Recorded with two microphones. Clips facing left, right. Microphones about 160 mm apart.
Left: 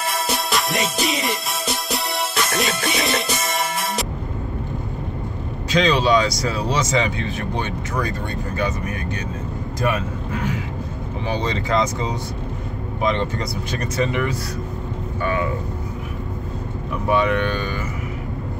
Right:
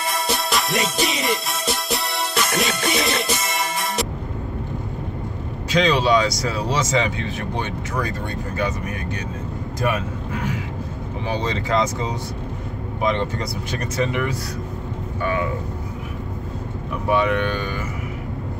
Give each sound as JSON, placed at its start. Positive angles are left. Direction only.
{"t": 0.1, "sound": "music", "side_deg": 0}
{"t": 5.7, "sound": "a man's voice", "side_deg": -5}
{"t": 11.2, "sound": "speech", "side_deg": -5}
{"t": 17.1, "sound": "speech", "side_deg": -5}